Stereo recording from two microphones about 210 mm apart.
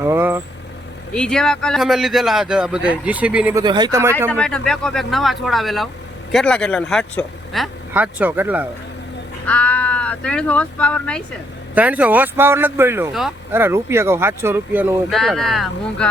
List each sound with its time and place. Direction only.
0.0 s speech: 10° right (ahead or behind)
1.1 s speech: 5° left (ahead or behind)
3.6 s speech: 20° right (ahead or behind)
4.3 s speech: 5° left (ahead or behind)
9.5 s speech: 5° left (ahead or behind)
11.7 s speech: 5° right (ahead or behind)